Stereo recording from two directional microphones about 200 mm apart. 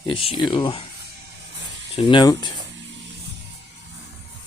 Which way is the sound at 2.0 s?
25° left (ahead or behind).